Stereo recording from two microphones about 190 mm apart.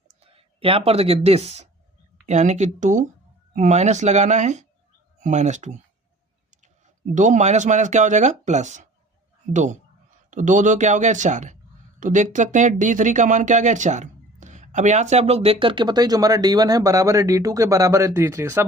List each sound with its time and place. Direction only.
0.2 s speech: 30° right (ahead or behind)
7.1 s speech: 40° right (ahead or behind); by 18.6 s 15° right (ahead or behind)